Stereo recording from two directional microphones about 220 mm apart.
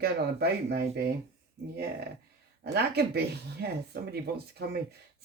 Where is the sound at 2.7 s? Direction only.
45° right (ahead or behind).